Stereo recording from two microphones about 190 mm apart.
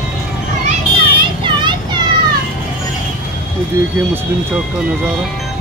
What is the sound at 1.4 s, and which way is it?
Children playing, 25° right (ahead or behind).